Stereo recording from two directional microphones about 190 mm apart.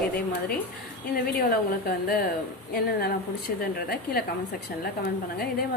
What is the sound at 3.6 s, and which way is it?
Speech, 55° left (ahead or behind).